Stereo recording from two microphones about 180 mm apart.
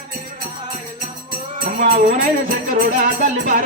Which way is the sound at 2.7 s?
50° right (ahead or behind).